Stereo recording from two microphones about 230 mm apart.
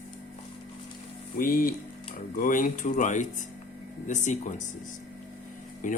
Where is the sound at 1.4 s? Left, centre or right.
Left.